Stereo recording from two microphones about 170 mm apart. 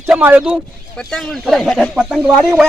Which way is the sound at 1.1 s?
5° left (ahead or behind).